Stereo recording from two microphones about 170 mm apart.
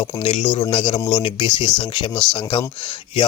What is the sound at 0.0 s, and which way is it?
Speech, 35° left (ahead or behind).